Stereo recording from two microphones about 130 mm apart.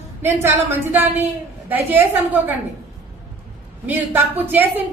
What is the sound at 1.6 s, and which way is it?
Speech, 15° right (ahead or behind).